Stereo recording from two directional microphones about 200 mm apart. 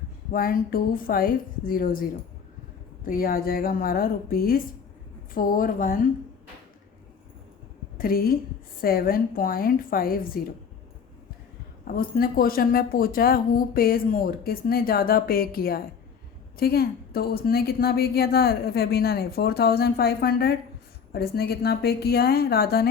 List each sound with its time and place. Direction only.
0.3 s a woman's voice: 45° left (ahead or behind)
7.9 s a woman's voice: 45° left (ahead or behind)
11.9 s a woman's voice: 45° left (ahead or behind)